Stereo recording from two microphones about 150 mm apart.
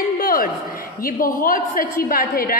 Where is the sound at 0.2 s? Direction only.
75° left (ahead or behind).